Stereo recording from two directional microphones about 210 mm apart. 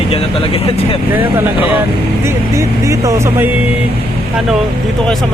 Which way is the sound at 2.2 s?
15° right (ahead or behind).